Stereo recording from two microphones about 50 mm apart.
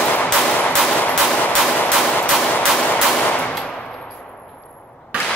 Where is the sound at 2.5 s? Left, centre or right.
Left.